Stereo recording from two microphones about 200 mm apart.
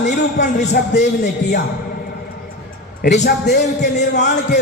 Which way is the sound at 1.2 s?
55° left (ahead or behind).